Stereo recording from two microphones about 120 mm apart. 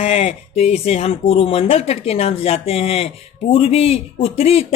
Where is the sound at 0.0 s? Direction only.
60° left (ahead or behind).